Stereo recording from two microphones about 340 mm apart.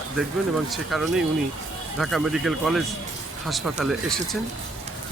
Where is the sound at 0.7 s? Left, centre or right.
Centre.